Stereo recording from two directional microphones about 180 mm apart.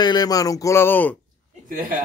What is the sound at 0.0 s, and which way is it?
Speech, 25° left (ahead or behind).